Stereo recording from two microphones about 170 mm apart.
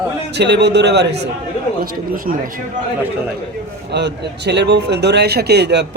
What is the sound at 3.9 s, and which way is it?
Speech, 85° right.